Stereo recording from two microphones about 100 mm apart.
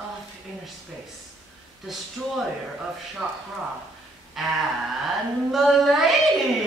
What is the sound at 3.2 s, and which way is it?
Speech, 20° right (ahead or behind).